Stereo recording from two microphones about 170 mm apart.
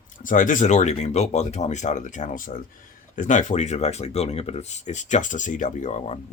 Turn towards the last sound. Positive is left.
turn(degrees=45)  # may be behind; listen again after turning